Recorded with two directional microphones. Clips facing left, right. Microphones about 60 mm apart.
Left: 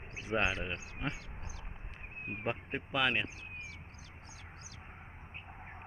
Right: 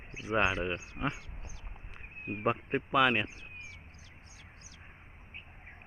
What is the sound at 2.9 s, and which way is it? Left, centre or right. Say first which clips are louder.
Speech: right 5 dB; centre.